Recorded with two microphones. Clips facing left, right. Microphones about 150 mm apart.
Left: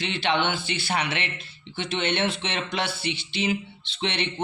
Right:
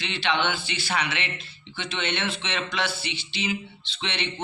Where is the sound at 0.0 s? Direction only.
50° left (ahead or behind).